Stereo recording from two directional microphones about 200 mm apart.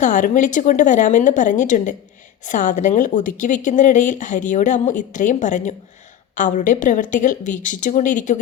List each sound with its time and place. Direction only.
0.0 s speech: 40° left (ahead or behind)